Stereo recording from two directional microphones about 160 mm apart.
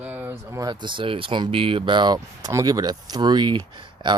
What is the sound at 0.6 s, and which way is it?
Speech, 30° right (ahead or behind).